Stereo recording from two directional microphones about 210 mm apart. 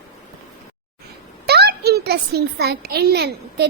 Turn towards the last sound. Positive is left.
turn(degrees=-50)  # may be behind; listen again after turning